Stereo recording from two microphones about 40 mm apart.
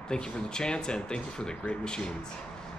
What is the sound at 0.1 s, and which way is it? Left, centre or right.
Speech, left.